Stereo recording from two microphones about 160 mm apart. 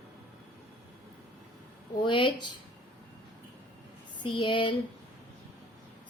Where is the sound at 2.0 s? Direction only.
30° left (ahead or behind).